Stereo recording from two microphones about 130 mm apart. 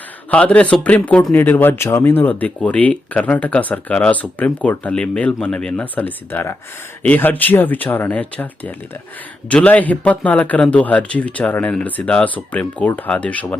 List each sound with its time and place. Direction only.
0.3 s speech: 10° left (ahead or behind)